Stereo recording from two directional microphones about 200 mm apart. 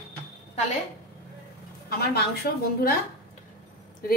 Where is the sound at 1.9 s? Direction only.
55° left (ahead or behind).